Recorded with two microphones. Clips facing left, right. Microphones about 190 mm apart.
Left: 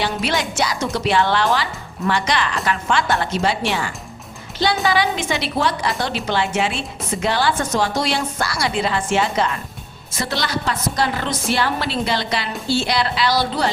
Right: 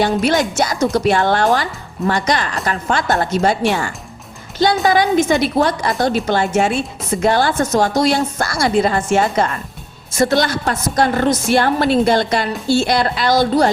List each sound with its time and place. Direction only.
0.0 s a woman's voice: 45° right (ahead or behind)